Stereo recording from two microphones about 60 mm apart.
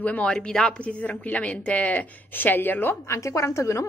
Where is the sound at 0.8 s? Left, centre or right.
Left.